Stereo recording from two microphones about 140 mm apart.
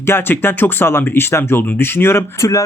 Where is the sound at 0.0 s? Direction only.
15° left (ahead or behind).